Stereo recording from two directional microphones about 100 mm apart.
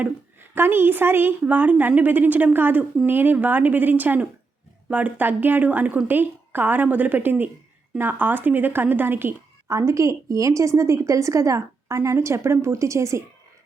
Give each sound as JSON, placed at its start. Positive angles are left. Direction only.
{"t": 0.0, "sound": "a woman's voice", "side_deg": -20}